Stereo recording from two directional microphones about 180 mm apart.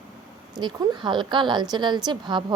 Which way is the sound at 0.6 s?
25° right (ahead or behind).